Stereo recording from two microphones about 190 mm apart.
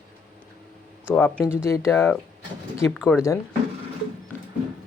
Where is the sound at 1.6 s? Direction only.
15° left (ahead or behind).